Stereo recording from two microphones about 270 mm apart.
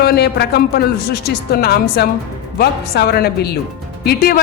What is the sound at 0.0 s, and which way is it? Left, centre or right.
Speech, left.